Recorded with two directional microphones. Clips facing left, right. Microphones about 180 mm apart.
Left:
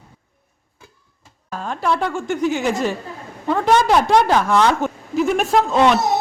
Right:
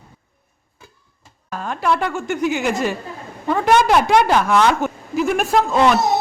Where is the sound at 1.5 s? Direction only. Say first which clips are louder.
Right 1 dB; centre (ahead or behind).